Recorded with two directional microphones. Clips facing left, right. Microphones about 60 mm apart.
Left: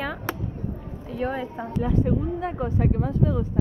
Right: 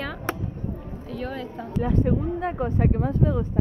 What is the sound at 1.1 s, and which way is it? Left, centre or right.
Speech, centre.